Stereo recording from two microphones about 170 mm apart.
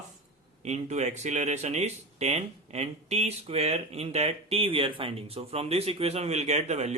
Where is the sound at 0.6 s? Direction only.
40° right (ahead or behind).